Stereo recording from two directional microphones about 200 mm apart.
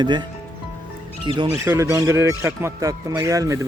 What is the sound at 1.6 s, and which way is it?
Speech, 15° right (ahead or behind).